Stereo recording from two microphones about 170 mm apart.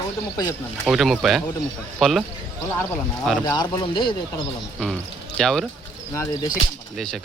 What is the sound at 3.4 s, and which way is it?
Speech, 25° left (ahead or behind).